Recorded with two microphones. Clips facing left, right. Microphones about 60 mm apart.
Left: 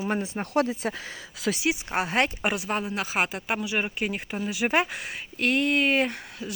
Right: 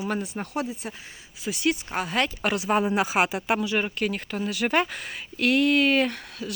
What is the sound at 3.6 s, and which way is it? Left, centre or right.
Speech, centre.